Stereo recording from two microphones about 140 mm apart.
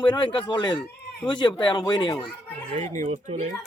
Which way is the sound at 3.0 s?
60° right (ahead or behind).